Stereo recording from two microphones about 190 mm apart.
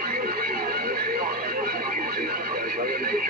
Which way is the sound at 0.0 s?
50° right (ahead or behind).